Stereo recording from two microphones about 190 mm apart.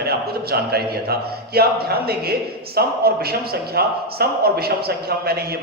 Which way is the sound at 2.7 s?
55° right (ahead or behind).